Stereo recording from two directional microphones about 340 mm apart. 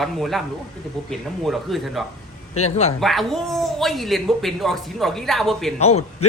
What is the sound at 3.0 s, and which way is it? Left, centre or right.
A man's voice, centre.